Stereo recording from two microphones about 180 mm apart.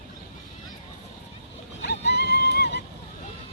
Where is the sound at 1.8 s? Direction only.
70° left (ahead or behind).